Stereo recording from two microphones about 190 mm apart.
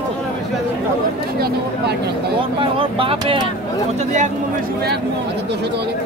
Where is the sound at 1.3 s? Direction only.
55° right (ahead or behind).